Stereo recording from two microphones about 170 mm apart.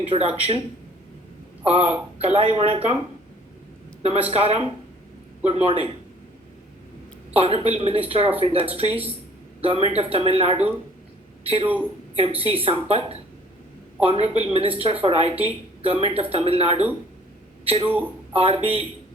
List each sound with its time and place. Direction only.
0.1 s a woman's voice: 35° right (ahead or behind)
1.6 s a woman's voice: 35° right (ahead or behind)
4.3 s a woman's voice: 35° right (ahead or behind)
7.3 s a woman's voice: 35° right (ahead or behind)